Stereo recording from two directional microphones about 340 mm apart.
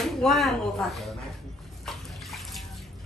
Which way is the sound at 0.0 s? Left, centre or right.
Centre.